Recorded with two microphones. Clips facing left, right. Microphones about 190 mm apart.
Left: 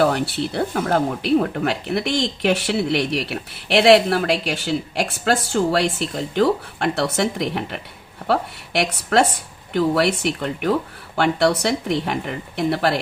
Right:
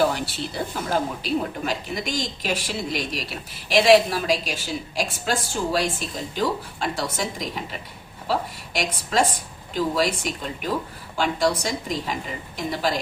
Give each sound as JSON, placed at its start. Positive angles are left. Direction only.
{"t": 0.0, "sound": "speech", "side_deg": 65}